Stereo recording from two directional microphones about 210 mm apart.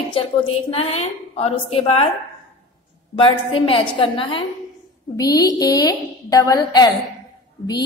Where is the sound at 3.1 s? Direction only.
25° left (ahead or behind).